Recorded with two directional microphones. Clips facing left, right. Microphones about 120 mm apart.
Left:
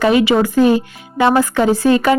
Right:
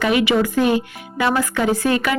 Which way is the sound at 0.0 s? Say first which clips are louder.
Left 4 dB; 30° left (ahead or behind).